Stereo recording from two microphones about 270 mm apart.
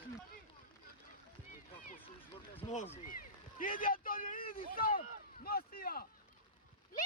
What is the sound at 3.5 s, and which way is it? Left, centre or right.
Speech, left.